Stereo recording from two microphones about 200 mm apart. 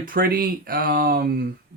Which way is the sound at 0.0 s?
45° right (ahead or behind).